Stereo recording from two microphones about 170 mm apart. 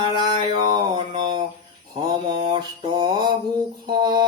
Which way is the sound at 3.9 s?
25° right (ahead or behind).